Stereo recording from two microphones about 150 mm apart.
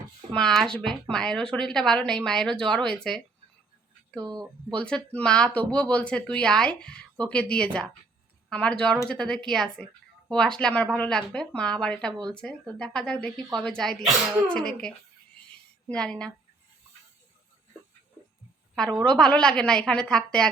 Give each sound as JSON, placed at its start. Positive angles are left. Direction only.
{"t": 0.3, "sound": "a woman's voice", "side_deg": 0}
{"t": 4.2, "sound": "speech", "side_deg": -30}
{"t": 4.7, "sound": "a woman's voice", "side_deg": 5}
{"t": 18.7, "sound": "a woman's voice", "side_deg": 5}